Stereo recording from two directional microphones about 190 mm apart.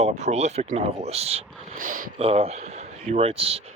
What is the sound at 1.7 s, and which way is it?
Speech, 45° right (ahead or behind).